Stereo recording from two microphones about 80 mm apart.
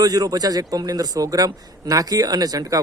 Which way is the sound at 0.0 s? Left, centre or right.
Right.